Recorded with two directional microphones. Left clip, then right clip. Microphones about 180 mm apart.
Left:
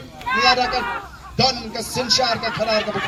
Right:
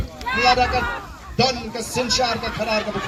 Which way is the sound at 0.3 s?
90° right.